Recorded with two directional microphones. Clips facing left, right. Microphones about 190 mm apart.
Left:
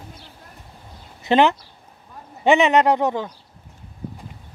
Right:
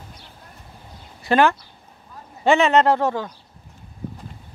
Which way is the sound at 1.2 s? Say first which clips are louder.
Left 1 dB; 20° left (ahead or behind).